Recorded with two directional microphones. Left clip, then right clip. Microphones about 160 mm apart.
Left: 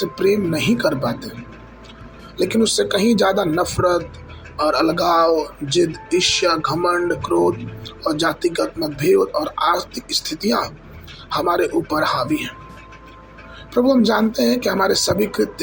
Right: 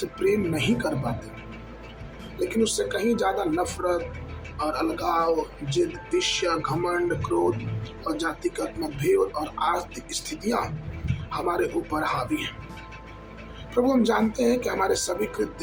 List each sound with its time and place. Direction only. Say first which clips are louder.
0.0 s speech: left 6 dB; 25° left (ahead or behind)
2.4 s speech: left 7 dB; 30° left (ahead or behind)
13.7 s speech: left 6 dB; 25° left (ahead or behind)